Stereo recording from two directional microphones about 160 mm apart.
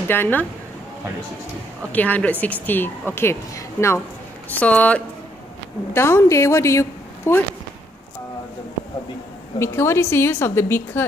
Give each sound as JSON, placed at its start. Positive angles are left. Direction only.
{"t": 0.1, "sound": "a woman's voice", "side_deg": 10}
{"t": 1.9, "sound": "a woman's voice", "side_deg": 10}
{"t": 9.6, "sound": "a woman's voice", "side_deg": 15}